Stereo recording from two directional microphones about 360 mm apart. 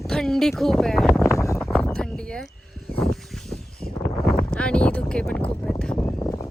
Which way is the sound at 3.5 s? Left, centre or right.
Centre.